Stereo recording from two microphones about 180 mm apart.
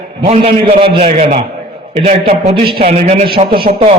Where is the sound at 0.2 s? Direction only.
30° right (ahead or behind).